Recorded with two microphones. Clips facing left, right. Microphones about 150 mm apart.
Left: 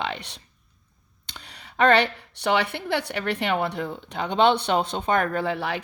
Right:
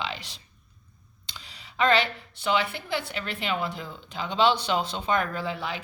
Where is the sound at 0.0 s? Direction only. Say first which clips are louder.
Left 4 dB; 60° left (ahead or behind).